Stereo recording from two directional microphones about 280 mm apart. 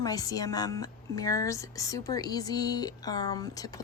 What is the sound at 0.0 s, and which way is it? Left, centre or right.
Speech, centre.